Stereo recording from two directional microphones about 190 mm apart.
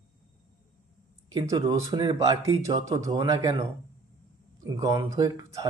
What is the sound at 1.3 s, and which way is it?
Speech, 15° right (ahead or behind).